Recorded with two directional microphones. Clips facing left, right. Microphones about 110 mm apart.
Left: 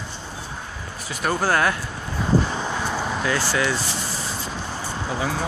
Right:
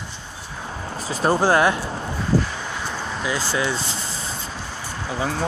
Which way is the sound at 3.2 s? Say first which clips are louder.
Right 1 dB; 15° right (ahead or behind).